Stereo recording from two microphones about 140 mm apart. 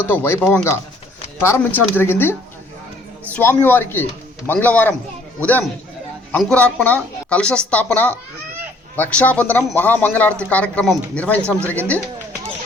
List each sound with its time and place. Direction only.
0.1 s speech: 15° left (ahead or behind)
3.3 s speech: 10° left (ahead or behind)
6.3 s speech: 10° left (ahead or behind)